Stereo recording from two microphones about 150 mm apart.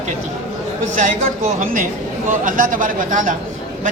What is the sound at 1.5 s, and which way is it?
Speech, 60° right (ahead or behind).